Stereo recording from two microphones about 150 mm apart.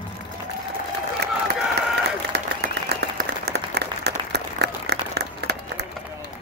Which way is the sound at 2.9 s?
90° right.